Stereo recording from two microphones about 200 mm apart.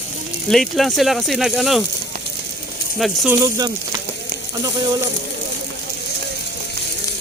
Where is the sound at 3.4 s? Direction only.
20° right (ahead or behind).